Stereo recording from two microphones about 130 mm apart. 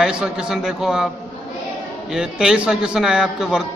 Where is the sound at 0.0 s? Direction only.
5° right (ahead or behind).